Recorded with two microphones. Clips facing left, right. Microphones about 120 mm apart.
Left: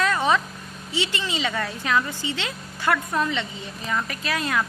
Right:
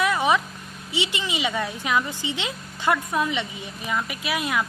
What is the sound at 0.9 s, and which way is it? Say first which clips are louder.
A woman's voice: even; 15° right (ahead or behind).